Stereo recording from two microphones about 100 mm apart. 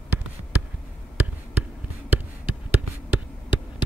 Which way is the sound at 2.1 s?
15° right (ahead or behind).